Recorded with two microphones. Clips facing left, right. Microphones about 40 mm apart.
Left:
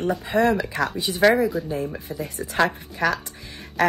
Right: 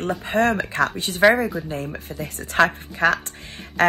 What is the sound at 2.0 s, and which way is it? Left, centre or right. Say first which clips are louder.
Speech: left 1 dB; right.